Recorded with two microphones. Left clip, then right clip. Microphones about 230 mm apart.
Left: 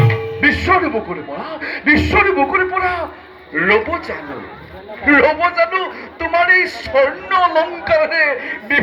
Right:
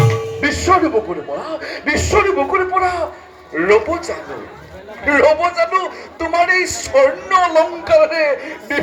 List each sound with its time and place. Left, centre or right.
0.1 s music: right
1.4 s a man's voice: right